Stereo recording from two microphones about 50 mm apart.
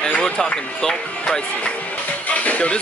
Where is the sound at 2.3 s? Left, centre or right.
Left.